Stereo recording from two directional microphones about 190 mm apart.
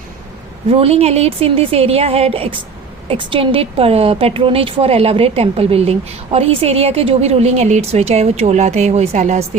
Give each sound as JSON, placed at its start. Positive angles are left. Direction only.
{"t": 0.7, "sound": "a woman's voice", "side_deg": -30}